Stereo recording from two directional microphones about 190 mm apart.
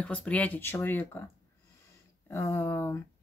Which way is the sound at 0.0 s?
5° left (ahead or behind).